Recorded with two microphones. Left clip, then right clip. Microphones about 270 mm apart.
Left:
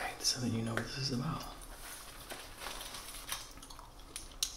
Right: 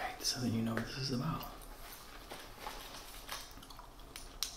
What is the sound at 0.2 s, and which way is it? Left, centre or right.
Speech, centre.